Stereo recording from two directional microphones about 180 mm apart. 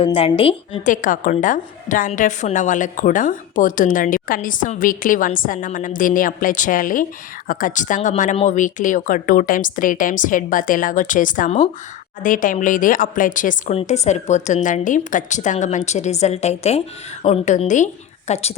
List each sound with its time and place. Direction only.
0.0 s a woman's voice: 30° left (ahead or behind)
0.9 s a woman's voice: 45° left (ahead or behind)